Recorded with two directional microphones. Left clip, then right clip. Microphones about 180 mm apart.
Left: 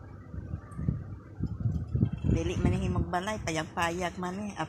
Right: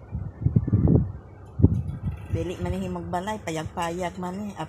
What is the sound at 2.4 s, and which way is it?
A woman's voice, 5° right (ahead or behind).